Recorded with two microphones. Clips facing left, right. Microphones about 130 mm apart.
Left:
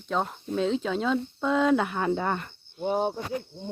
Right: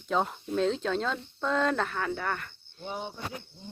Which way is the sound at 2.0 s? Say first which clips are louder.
Left 5 dB; 25° left (ahead or behind).